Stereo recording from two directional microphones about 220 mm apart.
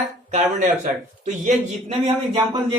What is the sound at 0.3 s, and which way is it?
Speech, 35° right (ahead or behind).